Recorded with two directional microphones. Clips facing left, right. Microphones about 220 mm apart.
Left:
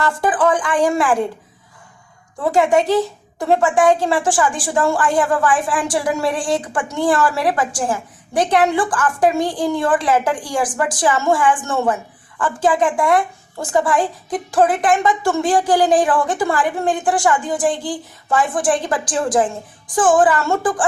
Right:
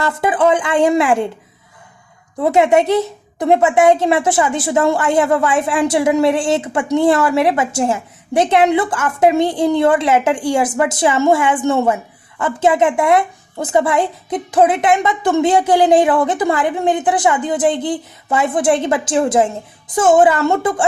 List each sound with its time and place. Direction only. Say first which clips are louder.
0.0 s a woman's voice: right 2 dB; 25° right (ahead or behind)
2.4 s a woman's voice: right 3 dB; 20° right (ahead or behind)